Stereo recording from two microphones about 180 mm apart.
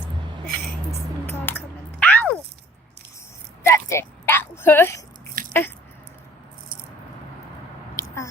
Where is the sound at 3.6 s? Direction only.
15° left (ahead or behind).